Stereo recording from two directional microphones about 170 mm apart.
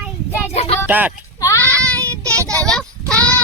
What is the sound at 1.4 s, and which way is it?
Child singing, 15° left (ahead or behind).